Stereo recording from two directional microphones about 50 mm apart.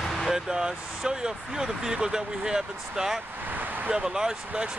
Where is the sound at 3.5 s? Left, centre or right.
Right.